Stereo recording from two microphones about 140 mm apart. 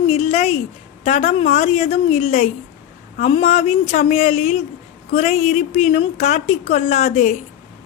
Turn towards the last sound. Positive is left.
turn(degrees=50)  # may be behind; listen again after turning